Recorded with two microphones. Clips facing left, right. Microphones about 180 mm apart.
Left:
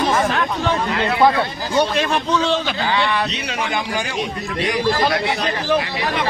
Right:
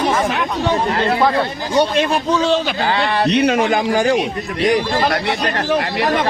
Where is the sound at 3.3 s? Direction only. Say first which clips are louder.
Right 10 dB; 55° right (ahead or behind); by 4.8 s 35° right (ahead or behind).